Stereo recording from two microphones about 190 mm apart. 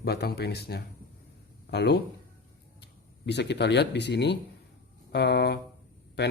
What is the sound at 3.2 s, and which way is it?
Speech, 65° left (ahead or behind).